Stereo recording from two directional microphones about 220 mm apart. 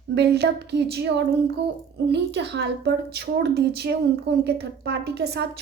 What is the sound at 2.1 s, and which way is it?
A child's voice, 50° right (ahead or behind).